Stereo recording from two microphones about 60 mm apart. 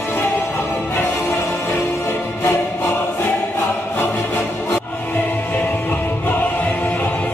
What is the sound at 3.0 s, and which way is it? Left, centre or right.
Choir, left.